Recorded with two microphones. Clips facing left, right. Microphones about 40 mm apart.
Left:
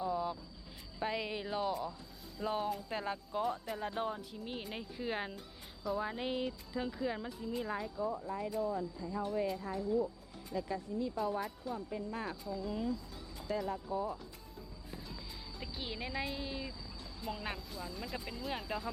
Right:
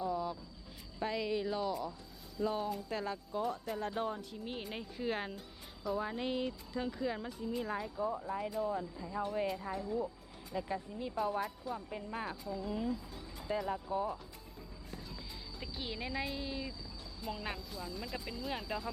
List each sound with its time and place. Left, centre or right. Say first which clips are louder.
0.0 s vehicle: left 1 dB; centre
0.9 s music: right 2 dB; centre
2.4 s speech: right 1 dB; centre
8.3 s speech: even; centre
11.3 s speech: right 1 dB; centre
11.9 s speech: left 1 dB; right
12.2 s speech: even; centre
13.8 s speech: right 1 dB; right
14.8 s music: even; centre
15.6 s speech: right 1 dB; centre